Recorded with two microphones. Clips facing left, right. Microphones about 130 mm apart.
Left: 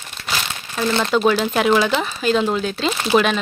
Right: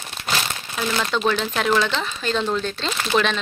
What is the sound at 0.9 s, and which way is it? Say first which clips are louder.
Speech: left 5 dB; 25° left (ahead or behind).